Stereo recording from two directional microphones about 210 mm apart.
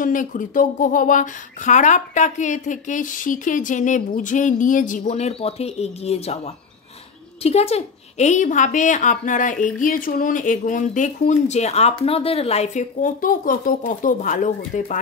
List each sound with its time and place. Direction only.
0.0 s a woman's voice: 40° left (ahead or behind)